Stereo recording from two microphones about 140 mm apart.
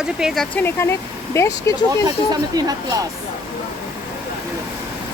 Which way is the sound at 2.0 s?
25° right (ahead or behind).